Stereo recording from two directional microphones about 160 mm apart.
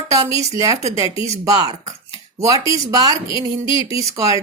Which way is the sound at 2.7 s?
25° right (ahead or behind).